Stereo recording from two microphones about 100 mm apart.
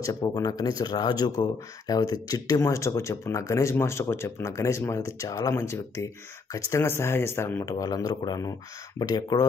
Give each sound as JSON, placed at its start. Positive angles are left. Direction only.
{"t": 0.0, "sound": "speech", "side_deg": 35}
{"t": 7.7, "sound": "speech", "side_deg": 35}